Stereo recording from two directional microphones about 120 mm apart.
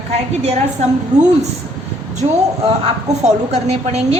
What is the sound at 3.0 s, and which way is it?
A woman's voice, 65° right (ahead or behind).